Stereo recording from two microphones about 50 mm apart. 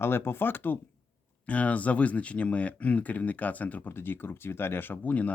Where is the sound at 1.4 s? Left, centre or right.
Left.